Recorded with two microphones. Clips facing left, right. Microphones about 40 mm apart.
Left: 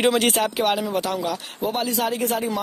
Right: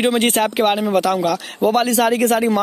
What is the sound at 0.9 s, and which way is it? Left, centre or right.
Speech, right.